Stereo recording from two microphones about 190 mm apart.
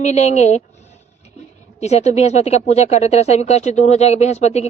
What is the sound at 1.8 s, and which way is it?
A woman's voice, 35° left (ahead or behind).